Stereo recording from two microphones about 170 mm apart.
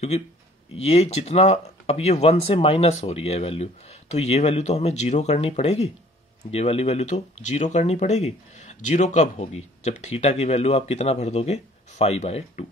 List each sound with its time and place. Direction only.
0.8 s speech: 40° left (ahead or behind)